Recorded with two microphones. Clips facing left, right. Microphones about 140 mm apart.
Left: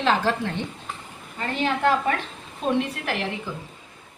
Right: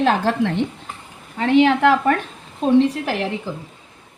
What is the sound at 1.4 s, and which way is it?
Speech, 80° right.